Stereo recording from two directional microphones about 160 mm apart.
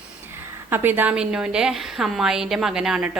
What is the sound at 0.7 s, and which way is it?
A woman's voice, 10° right (ahead or behind).